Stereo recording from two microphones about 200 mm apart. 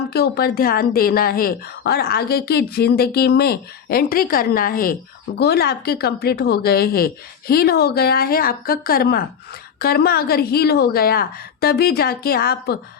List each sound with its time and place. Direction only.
0.1 s speech: 50° left (ahead or behind)